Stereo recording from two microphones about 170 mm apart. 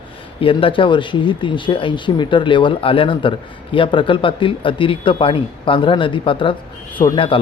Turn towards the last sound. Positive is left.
turn(degrees=30)  # may be behind; listen again after turning